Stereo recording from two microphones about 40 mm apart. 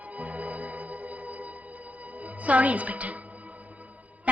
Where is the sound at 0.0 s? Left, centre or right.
Right.